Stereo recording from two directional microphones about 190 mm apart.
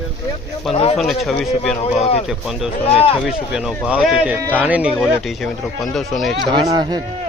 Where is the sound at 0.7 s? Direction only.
30° left (ahead or behind).